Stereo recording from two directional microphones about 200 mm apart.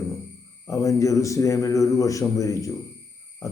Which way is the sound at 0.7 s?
15° left (ahead or behind).